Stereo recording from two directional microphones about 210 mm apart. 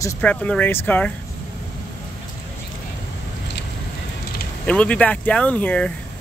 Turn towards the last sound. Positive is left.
turn(degrees=5)  # may be behind; listen again after turning